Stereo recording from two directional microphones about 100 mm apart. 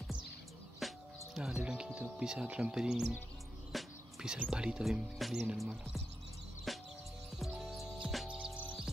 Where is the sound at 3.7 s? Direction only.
5° right (ahead or behind).